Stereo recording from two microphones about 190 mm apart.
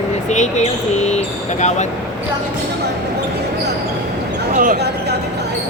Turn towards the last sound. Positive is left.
turn(degrees=-50)  # may be behind; listen again after turning